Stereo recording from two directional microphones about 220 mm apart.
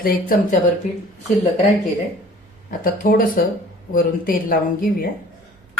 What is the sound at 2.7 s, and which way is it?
Speech, 40° left (ahead or behind).